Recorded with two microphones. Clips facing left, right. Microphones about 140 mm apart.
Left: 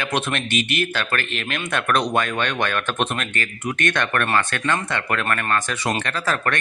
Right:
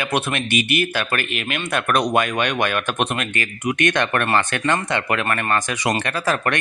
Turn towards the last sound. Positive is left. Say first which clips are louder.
# right 2 dB
turn(degrees=-15)  # may be behind; listen again after turning